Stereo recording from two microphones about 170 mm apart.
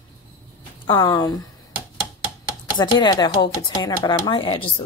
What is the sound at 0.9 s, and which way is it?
Speech, 30° left (ahead or behind).